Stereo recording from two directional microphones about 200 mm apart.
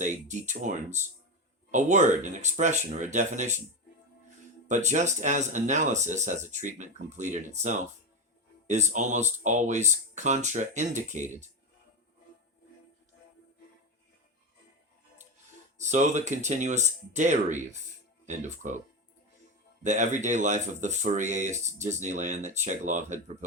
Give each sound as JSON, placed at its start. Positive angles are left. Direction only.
{"t": 0.0, "sound": "speech", "side_deg": -35}
{"t": 4.7, "sound": "speech", "side_deg": -35}
{"t": 15.8, "sound": "speech", "side_deg": -35}
{"t": 19.8, "sound": "speech", "side_deg": -35}